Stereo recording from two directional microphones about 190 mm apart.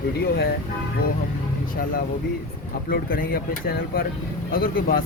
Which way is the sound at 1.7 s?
50° left (ahead or behind).